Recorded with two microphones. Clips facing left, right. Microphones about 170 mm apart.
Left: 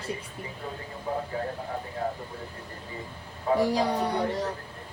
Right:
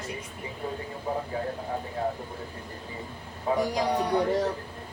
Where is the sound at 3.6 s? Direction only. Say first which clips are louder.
Left 3 dB; 30° left (ahead or behind).